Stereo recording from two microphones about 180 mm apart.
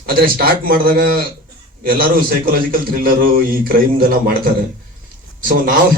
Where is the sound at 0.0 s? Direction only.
55° right (ahead or behind).